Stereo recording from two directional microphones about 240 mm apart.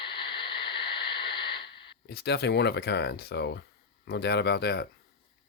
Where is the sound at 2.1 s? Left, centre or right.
Left.